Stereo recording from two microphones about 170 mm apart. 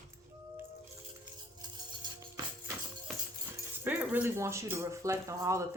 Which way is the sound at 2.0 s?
25° right (ahead or behind).